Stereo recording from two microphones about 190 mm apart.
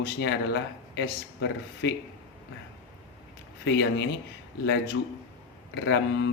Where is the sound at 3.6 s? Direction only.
65° left (ahead or behind).